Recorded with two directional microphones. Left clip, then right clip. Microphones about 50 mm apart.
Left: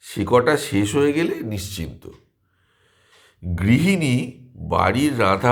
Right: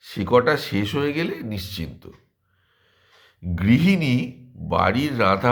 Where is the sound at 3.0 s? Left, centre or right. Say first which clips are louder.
Left 1 dB; left.